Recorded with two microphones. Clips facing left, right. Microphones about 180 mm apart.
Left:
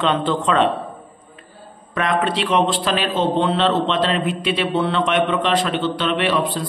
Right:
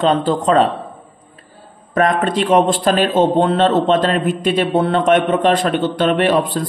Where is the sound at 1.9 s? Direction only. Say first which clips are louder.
Right 5 dB; 45° right (ahead or behind).